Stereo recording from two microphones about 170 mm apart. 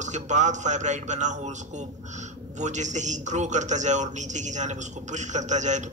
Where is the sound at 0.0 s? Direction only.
45° right (ahead or behind).